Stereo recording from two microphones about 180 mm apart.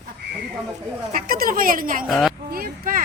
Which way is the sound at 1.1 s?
50° right (ahead or behind).